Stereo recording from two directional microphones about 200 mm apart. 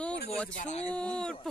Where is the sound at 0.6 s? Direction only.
35° left (ahead or behind).